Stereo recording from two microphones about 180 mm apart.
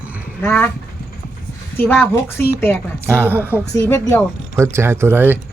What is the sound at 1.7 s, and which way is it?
Speech, 10° left (ahead or behind).